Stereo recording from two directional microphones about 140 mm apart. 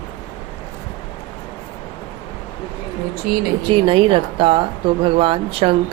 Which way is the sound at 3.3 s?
90° right.